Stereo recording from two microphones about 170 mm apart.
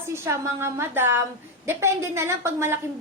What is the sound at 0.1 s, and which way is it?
A woman's voice, 15° right (ahead or behind).